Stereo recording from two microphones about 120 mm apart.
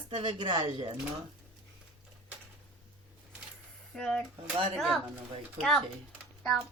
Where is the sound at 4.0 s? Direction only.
5° left (ahead or behind).